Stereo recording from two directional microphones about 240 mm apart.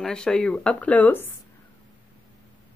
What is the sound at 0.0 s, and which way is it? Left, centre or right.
A woman's voice, centre.